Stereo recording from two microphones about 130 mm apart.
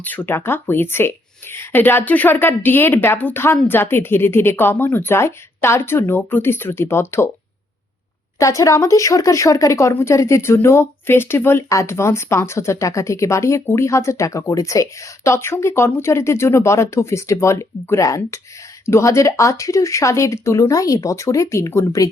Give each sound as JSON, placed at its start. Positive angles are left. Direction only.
{"t": 0.0, "sound": "speech", "side_deg": 15}
{"t": 8.4, "sound": "speech", "side_deg": 25}